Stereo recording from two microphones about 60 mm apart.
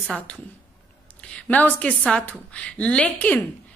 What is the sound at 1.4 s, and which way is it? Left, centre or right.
A woman's voice, left.